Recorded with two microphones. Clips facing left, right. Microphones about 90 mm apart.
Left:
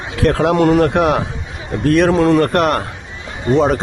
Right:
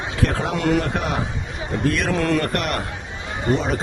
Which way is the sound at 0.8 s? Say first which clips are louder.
Left 10 dB; 60° left (ahead or behind).